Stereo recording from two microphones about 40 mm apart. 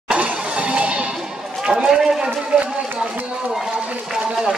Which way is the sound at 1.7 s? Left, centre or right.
Centre.